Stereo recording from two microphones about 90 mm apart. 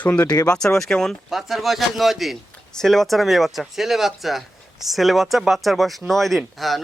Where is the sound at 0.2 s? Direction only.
45° left (ahead or behind).